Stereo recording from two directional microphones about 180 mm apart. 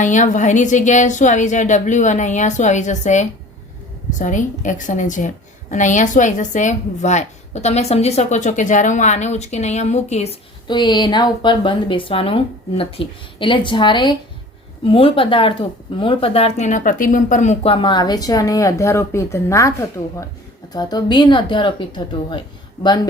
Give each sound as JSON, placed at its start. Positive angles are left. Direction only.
{"t": 0.0, "sound": "a woman's voice", "side_deg": 45}
{"t": 10.7, "sound": "a woman's voice", "side_deg": 25}
{"t": 20.7, "sound": "speech", "side_deg": 25}